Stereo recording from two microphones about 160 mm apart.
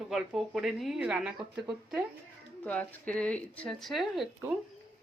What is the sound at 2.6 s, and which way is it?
Speech, 10° left (ahead or behind).